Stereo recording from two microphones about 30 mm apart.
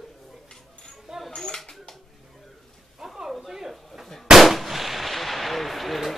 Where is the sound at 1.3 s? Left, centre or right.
Left.